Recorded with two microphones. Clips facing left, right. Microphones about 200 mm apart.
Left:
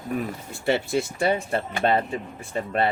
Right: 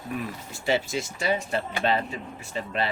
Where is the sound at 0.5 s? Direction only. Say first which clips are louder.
Left 3 dB; 60° left (ahead or behind).